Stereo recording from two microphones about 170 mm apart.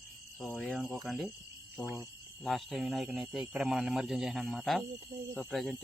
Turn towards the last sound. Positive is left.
turn(degrees=0)  # may be behind; listen again after turning